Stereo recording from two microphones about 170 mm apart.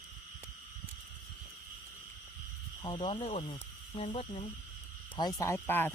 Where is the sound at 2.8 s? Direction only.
30° left (ahead or behind).